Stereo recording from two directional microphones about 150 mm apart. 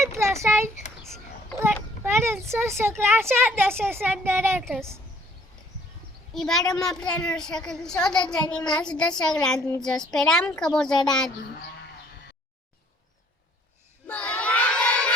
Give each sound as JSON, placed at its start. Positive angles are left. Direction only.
{"t": 0.0, "sound": "a sound", "side_deg": -20}
{"t": 1.5, "sound": "a child's voice", "side_deg": -15}
{"t": 6.3, "sound": "a child's voice", "side_deg": 0}
{"t": 14.1, "sound": "crowd", "side_deg": 10}